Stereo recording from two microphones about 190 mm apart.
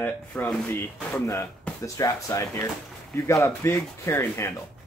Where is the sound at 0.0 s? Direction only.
5° left (ahead or behind).